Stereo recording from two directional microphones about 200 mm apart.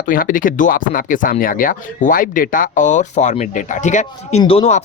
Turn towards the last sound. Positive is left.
turn(degrees=30)  # may be behind; listen again after turning